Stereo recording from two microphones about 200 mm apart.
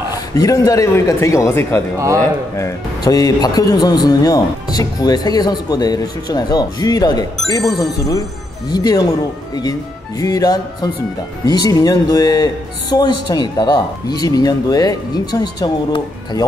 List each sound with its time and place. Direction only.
0.3 s speech: 15° left (ahead or behind)